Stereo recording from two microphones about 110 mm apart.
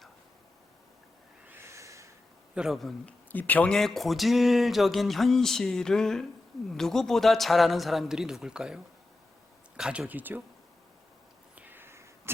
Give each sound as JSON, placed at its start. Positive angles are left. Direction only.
{"t": 1.5, "sound": "snort", "side_deg": -25}
{"t": 2.6, "sound": "speech", "side_deg": 0}
{"t": 3.1, "sound": "speech", "side_deg": 15}
{"t": 11.5, "sound": "a sound", "side_deg": -15}